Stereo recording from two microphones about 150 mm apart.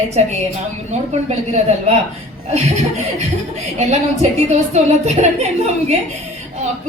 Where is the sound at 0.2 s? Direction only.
45° right (ahead or behind).